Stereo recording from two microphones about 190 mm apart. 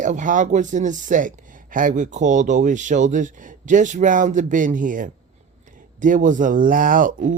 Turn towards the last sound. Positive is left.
turn(degrees=-45)  # may be behind; listen again after turning